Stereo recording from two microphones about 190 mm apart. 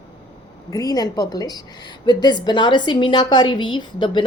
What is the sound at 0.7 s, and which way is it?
A woman's voice, 20° left (ahead or behind).